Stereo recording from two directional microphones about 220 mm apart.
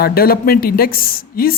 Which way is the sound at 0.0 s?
45° left (ahead or behind).